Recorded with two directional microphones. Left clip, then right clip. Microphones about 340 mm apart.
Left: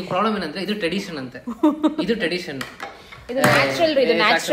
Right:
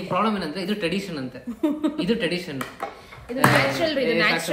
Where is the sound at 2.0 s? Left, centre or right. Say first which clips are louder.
Left 2 dB; centre.